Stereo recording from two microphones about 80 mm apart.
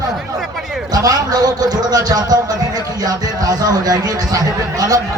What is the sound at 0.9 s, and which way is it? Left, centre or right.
A man's voice, right.